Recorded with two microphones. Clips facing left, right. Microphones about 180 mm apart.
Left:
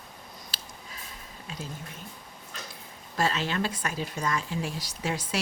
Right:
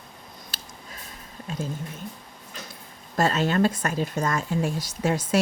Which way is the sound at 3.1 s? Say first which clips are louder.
Right 6 dB; 45° right (ahead or behind).